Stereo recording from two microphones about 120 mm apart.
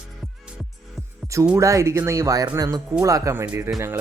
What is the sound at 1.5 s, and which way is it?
Speech, 25° right (ahead or behind).